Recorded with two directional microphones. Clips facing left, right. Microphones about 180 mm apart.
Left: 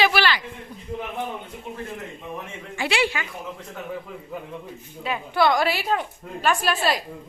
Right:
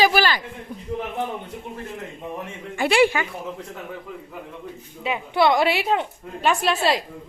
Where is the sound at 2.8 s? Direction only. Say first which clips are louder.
Right 6 dB; 50° right (ahead or behind).